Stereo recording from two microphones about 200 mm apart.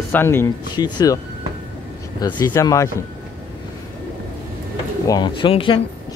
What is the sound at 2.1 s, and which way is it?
Speech, 20° left (ahead or behind).